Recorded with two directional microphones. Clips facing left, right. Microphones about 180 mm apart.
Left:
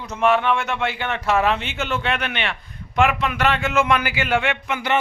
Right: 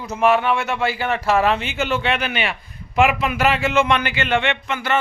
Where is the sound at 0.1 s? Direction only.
5° right (ahead or behind).